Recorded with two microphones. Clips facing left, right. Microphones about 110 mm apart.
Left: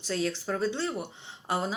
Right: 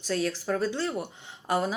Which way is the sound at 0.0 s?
25° left (ahead or behind).